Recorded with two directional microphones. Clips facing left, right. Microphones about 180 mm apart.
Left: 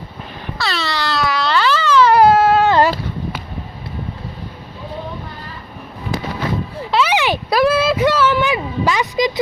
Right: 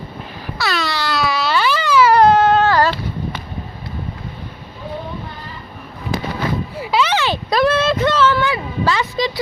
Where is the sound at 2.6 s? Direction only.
20° left (ahead or behind).